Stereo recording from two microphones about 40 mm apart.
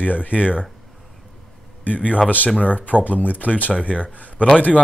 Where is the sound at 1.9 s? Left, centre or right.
Left.